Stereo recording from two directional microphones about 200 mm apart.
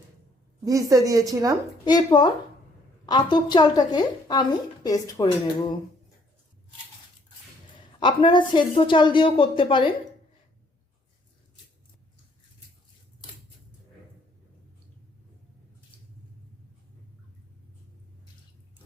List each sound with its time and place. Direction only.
0.6 s a woman's voice: 15° right (ahead or behind)
1.8 s a woman's voice: 20° left (ahead or behind)
7.9 s a woman's voice: 25° left (ahead or behind)